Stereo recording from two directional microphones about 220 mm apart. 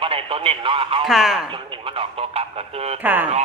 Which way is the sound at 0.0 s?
25° right (ahead or behind).